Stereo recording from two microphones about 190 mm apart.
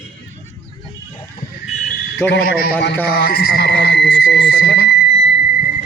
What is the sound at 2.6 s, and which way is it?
Speech, 55° left (ahead or behind).